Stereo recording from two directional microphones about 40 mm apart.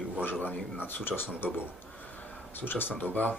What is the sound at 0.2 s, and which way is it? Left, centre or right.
Speech, left.